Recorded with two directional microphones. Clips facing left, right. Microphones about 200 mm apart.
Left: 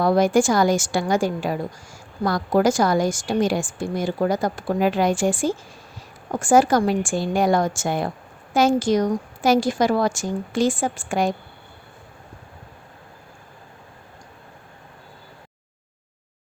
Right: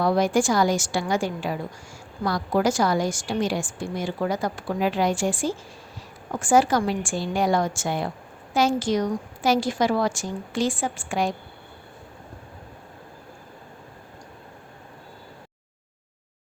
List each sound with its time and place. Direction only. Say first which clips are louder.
0.0 s a woman's voice: left 3 dB; 45° left (ahead or behind)